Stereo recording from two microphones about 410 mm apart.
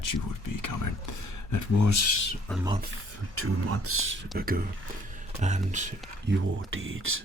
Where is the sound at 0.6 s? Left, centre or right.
Left.